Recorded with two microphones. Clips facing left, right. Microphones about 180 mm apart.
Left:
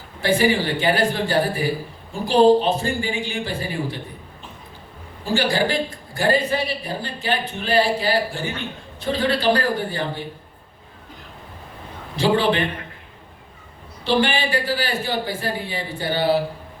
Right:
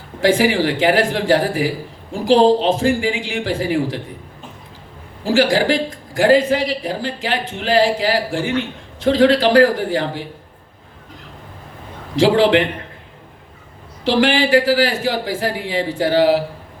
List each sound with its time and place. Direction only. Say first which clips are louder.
0.2 s a man's voice: right 4 dB; 90° right
5.2 s a man's voice: right 5 dB; 90° right
12.1 s a man's voice: right 6 dB; 90° right
14.0 s a man's voice: right 5 dB; 90° right